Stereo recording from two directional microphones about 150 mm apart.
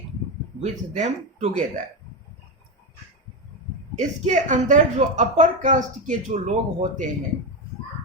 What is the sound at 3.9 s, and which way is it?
A woman's voice, 55° right (ahead or behind).